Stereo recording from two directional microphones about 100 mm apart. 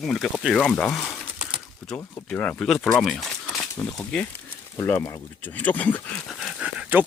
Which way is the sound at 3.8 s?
15° left (ahead or behind).